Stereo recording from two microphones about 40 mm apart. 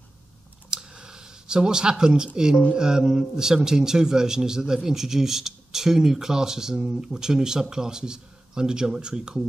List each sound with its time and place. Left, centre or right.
0.7 s a man's voice: centre